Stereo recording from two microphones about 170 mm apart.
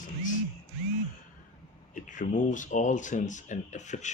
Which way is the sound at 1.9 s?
50° left (ahead or behind).